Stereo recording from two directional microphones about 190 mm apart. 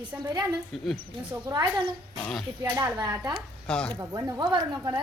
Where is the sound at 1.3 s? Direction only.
15° right (ahead or behind).